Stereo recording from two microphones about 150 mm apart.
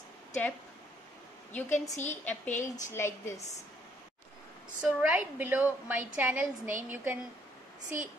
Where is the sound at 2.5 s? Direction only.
55° left (ahead or behind).